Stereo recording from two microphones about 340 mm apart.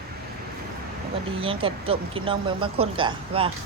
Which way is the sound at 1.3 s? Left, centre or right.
Centre.